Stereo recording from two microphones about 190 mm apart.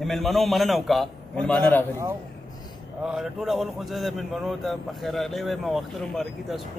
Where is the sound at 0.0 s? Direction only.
Centre (ahead or behind).